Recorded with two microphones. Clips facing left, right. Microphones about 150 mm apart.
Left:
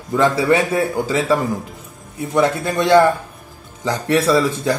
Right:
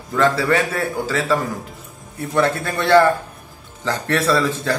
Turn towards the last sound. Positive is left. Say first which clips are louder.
# left 2 dB
turn(degrees=15)  # may be behind; listen again after turning